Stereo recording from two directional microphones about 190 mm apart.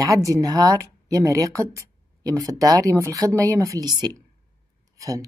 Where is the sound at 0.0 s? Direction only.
15° right (ahead or behind).